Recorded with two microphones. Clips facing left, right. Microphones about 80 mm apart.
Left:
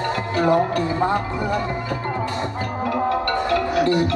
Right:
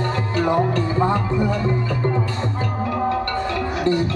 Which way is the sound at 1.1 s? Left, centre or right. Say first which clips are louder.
Right 2 dB; left.